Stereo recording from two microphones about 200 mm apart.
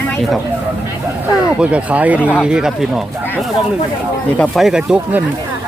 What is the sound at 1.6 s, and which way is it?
Speech, 5° right (ahead or behind).